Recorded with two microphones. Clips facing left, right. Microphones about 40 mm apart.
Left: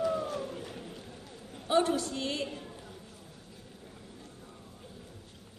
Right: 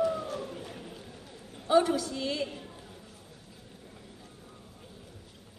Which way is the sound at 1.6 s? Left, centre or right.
Left.